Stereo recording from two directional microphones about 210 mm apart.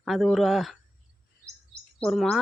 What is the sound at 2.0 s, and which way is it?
Speech, centre (ahead or behind).